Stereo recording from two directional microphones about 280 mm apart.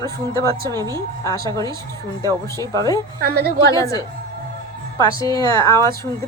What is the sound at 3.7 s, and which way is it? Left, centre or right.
Speech, centre.